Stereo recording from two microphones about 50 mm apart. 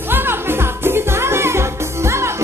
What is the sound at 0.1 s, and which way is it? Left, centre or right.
Music, right.